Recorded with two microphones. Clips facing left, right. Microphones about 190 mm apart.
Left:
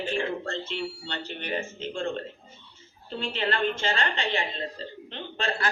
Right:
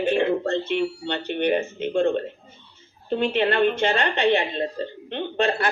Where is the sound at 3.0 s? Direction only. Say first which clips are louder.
Right 9 dB; 60° right (ahead or behind).